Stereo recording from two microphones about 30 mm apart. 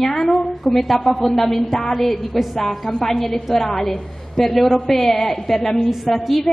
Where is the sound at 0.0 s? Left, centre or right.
Centre.